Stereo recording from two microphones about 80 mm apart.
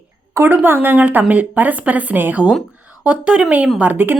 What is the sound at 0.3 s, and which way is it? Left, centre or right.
A woman's voice, right.